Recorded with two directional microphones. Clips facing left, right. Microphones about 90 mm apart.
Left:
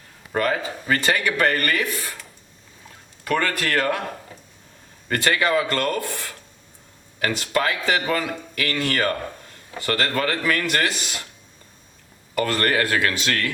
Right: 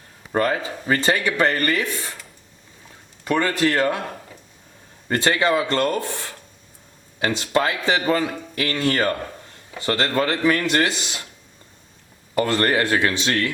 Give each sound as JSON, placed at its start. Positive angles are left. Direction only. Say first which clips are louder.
{"t": 0.3, "sound": "speech", "louder": "right 2 dB", "side_deg": -30}
{"t": 3.2, "sound": "speech", "louder": "right 3 dB", "side_deg": -20}
{"t": 5.0, "sound": "speech", "louder": "right 2 dB", "side_deg": -25}
{"t": 12.3, "sound": "speech", "louder": "right 2 dB", "side_deg": -25}